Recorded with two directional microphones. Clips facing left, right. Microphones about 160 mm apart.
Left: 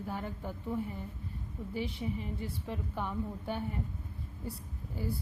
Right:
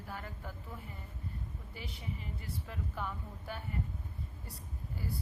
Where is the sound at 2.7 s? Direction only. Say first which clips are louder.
Left 3 dB; 25° left (ahead or behind).